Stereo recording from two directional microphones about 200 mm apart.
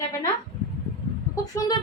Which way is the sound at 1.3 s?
20° left (ahead or behind).